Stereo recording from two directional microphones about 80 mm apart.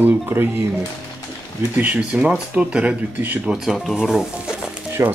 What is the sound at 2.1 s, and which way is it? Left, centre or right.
Speech, centre.